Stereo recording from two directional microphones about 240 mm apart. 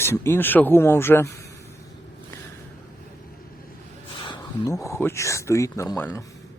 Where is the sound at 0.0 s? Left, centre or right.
Centre.